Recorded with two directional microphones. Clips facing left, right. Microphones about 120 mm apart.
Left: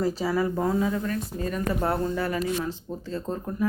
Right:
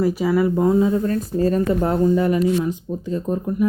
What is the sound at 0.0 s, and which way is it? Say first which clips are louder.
Speech: right 7 dB; 15° right (ahead or behind).